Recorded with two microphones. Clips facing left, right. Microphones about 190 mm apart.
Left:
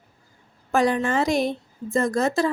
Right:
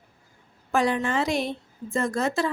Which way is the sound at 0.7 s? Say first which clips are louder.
Left 3 dB; 45° left (ahead or behind).